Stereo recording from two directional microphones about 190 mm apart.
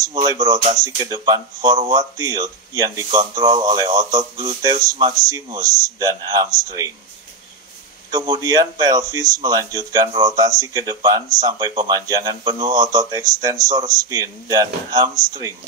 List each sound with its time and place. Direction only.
0.1 s speech: 20° right (ahead or behind)
8.1 s speech: 20° right (ahead or behind)